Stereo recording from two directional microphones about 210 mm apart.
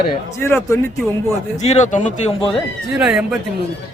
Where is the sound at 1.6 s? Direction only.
35° left (ahead or behind).